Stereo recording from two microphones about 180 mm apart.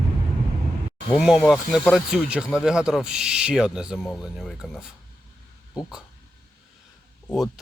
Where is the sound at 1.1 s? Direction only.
Centre (ahead or behind).